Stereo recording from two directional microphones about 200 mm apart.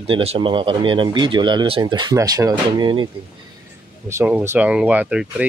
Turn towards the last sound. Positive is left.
turn(degrees=-5)  # may be behind; listen again after turning